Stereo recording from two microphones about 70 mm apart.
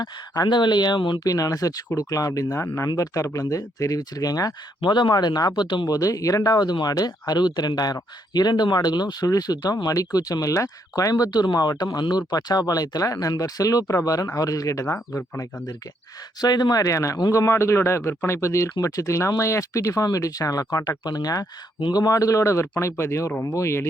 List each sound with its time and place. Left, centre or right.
0.0 s speech: left
2.9 s speech: left
11.9 s speech: left
16.4 s a man's voice: left